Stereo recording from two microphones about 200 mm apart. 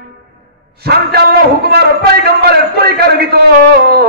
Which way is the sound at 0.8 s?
55° right (ahead or behind).